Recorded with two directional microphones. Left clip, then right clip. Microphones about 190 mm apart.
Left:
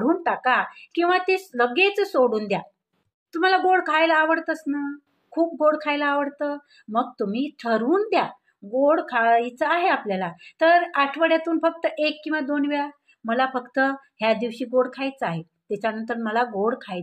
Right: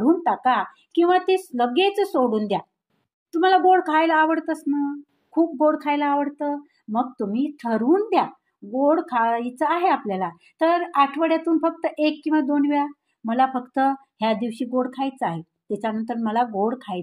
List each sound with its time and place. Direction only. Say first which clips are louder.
0.0 s a woman's voice: right 2 dB; 40° right (ahead or behind)